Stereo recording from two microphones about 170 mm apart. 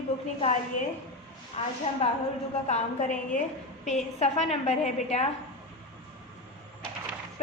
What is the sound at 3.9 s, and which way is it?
A woman's voice, 40° left (ahead or behind).